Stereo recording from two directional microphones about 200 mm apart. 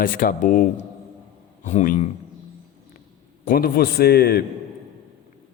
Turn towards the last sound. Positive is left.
turn(degrees=50)  # may be behind; listen again after turning